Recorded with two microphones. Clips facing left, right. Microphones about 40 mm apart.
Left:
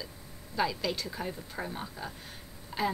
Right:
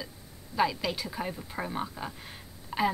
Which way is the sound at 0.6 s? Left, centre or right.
Centre.